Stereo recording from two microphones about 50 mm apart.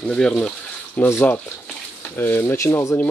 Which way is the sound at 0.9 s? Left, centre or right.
Left.